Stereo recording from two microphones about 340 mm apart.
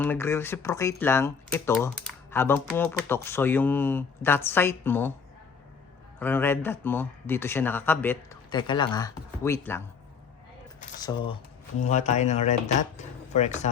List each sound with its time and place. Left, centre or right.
0.0 s speech: centre
6.1 s speech: centre
11.0 s speech: centre